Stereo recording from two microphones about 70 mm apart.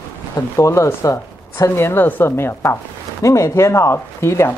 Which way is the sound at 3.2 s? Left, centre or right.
Left.